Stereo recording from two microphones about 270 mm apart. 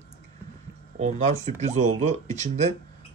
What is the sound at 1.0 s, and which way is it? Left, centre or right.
Speech, right.